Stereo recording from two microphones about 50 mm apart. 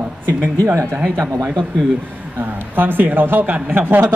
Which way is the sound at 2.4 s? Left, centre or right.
Right.